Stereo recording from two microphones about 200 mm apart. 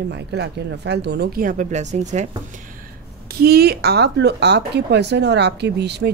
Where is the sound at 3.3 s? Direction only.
50° right (ahead or behind).